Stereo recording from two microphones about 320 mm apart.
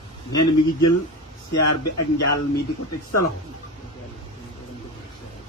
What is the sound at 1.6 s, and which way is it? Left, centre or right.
Speech, left.